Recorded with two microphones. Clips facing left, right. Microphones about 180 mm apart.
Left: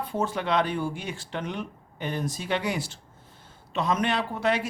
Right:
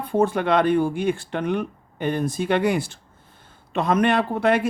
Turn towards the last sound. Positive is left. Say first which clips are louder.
# right 6 dB
turn(degrees=-55)  # may be behind; listen again after turning